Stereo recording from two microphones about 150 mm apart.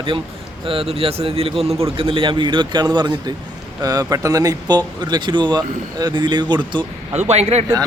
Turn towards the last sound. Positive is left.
turn(degrees=-45)  # may be behind; listen again after turning